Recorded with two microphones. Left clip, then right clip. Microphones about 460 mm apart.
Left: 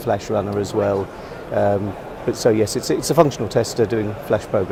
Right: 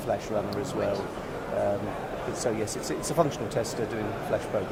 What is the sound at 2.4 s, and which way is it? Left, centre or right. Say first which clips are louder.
Speech: left 14 dB; left.